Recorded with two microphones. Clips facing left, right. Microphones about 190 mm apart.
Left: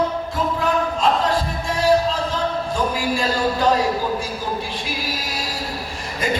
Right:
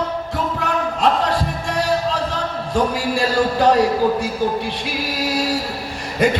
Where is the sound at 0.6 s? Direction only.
65° right (ahead or behind).